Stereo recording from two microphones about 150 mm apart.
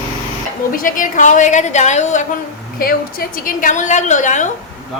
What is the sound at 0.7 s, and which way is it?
A woman's voice, 65° left (ahead or behind).